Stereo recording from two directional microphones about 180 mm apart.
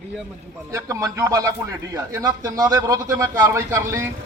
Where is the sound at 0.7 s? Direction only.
15° right (ahead or behind).